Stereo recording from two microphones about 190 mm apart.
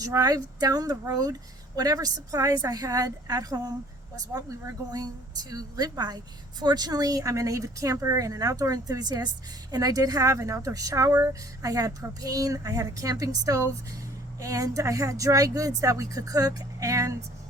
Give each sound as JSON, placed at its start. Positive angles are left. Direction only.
{"t": 0.0, "sound": "speech", "side_deg": -20}